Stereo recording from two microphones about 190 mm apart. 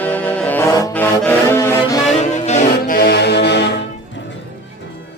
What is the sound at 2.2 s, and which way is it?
Music, 35° left (ahead or behind).